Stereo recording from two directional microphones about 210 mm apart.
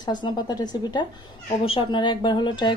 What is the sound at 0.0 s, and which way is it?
Speech, 20° left (ahead or behind).